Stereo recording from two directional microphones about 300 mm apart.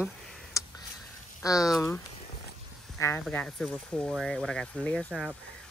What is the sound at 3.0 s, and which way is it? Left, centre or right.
Speech, centre.